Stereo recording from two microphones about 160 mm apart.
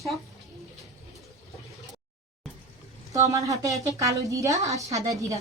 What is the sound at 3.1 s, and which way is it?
A woman's voice, 20° right (ahead or behind).